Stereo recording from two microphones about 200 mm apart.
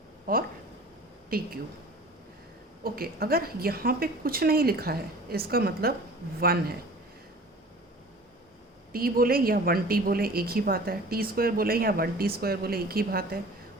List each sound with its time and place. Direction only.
0.3 s a woman's voice: 45° right (ahead or behind)
2.8 s a woman's voice: 50° right (ahead or behind)
8.9 s a woman's voice: 45° right (ahead or behind)